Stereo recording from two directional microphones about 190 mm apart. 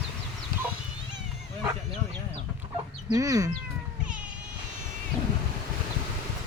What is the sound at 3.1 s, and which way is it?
Speech, 20° right (ahead or behind).